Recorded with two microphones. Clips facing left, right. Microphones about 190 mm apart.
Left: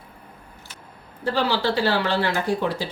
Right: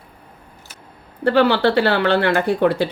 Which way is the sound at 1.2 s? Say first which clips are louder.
Right 8 dB; 65° right (ahead or behind).